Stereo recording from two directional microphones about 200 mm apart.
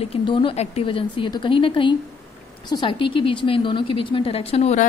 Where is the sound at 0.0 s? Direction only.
25° left (ahead or behind).